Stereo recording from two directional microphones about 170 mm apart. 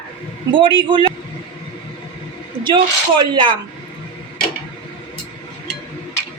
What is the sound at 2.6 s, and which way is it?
Speech, 25° right (ahead or behind).